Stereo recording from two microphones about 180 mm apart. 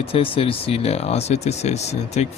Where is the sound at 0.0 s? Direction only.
30° left (ahead or behind).